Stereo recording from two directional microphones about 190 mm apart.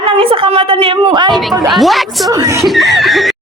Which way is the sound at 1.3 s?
Centre (ahead or behind).